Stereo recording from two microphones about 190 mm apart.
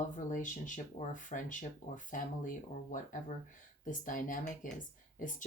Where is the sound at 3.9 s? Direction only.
45° left (ahead or behind).